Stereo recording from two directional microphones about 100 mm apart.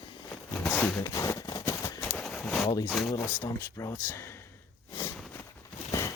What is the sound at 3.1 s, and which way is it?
Speech, 15° left (ahead or behind).